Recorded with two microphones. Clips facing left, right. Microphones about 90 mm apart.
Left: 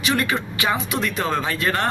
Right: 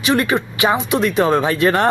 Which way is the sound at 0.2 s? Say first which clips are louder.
Right 6 dB; 20° right (ahead or behind).